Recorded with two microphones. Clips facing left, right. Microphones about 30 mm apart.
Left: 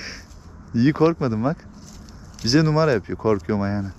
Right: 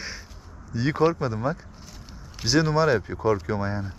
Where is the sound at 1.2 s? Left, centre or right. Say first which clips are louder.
Left 4 dB; left.